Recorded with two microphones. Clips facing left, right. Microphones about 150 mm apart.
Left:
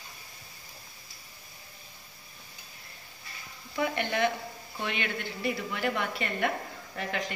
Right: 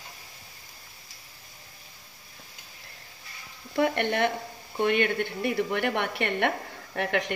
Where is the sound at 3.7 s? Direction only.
55° right (ahead or behind).